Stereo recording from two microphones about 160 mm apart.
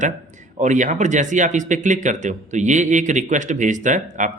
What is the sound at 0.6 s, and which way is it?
Speech, 50° right (ahead or behind).